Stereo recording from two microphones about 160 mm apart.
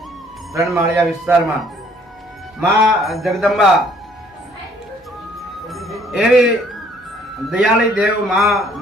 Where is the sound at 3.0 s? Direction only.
Centre (ahead or behind).